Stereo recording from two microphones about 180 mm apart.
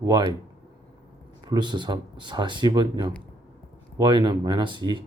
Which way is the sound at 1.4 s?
25° right (ahead or behind).